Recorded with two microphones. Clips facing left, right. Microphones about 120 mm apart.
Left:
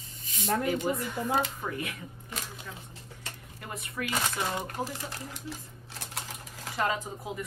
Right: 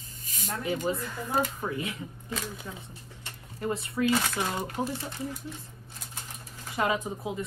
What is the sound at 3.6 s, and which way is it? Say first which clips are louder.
Speech: right 8 dB; 30° right (ahead or behind).